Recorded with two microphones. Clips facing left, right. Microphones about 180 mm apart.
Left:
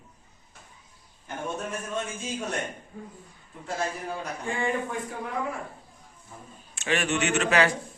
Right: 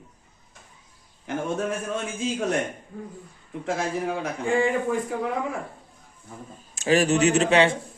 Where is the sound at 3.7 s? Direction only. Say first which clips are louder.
Right 5 dB; 90° right.